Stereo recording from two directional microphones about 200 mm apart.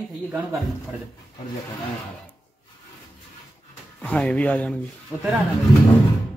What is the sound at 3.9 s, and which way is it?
Speech, 5° left (ahead or behind).